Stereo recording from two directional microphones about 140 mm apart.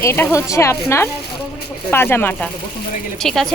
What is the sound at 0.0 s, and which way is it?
A woman's voice, 15° left (ahead or behind).